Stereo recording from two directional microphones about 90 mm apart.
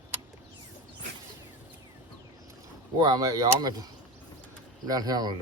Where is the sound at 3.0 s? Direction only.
50° right (ahead or behind).